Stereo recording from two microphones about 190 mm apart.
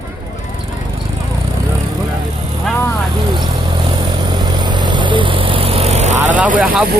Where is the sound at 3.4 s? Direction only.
25° right (ahead or behind).